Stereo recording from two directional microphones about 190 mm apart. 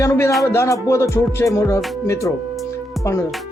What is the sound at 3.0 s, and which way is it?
Speech, 15° left (ahead or behind).